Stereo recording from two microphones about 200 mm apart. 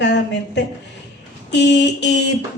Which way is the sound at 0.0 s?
60° left (ahead or behind).